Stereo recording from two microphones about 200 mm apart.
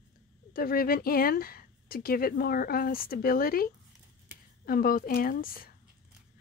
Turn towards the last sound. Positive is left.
turn(degrees=45)  # may be behind; listen again after turning